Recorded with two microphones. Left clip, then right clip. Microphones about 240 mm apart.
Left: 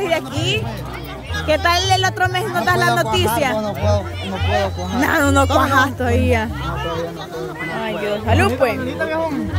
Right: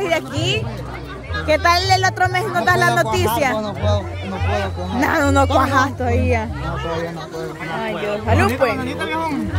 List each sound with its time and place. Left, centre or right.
0.0 s speech: centre
6.0 s a woman's voice: centre
7.8 s speech: centre
8.7 s speech: right